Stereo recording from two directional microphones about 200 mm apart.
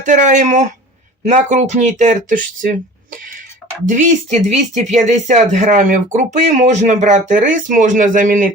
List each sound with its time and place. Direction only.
0.0 s speech: 40° right (ahead or behind)
3.8 s speech: 35° right (ahead or behind)